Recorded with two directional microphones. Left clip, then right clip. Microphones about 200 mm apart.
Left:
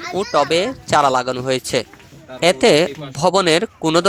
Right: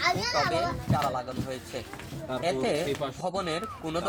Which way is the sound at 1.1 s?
55° left (ahead or behind).